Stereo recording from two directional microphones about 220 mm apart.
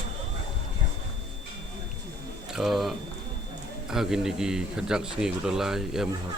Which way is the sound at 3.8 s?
Centre (ahead or behind).